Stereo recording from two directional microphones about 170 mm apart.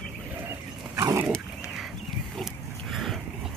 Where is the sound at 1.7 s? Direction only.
Centre (ahead or behind).